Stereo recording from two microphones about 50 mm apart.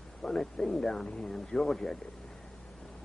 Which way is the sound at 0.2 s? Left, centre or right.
Centre.